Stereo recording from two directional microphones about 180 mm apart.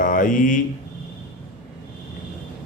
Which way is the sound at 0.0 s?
50° left (ahead or behind).